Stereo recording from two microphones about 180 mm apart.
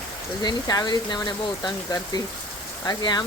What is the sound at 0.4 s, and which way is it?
Speech, 20° left (ahead or behind).